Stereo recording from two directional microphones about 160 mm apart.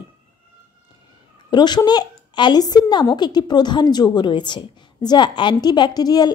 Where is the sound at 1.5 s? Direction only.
25° left (ahead or behind).